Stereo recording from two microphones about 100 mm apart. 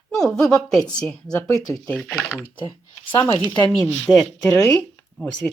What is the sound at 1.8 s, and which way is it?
Speech, 10° left (ahead or behind).